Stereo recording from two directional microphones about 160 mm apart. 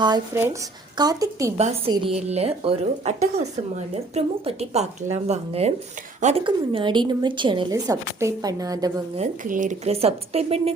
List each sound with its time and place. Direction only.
0.3 s speech: 20° right (ahead or behind)
1.5 s a woman's voice: 40° right (ahead or behind)
6.4 s speech: 30° right (ahead or behind)
9.1 s speech: 50° right (ahead or behind)